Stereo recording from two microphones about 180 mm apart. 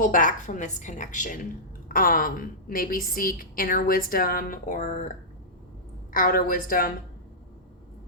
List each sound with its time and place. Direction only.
0.0 s a woman's voice: 45° left (ahead or behind)
6.1 s a woman's voice: 50° left (ahead or behind)